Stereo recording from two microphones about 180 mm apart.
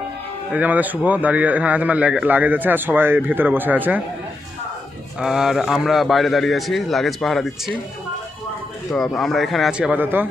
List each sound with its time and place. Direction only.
0.5 s a man's voice: 10° right (ahead or behind)
5.2 s a man's voice: centre (ahead or behind)
8.9 s a man's voice: centre (ahead or behind)